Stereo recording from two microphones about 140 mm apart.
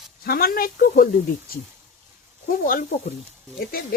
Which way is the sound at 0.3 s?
90° left.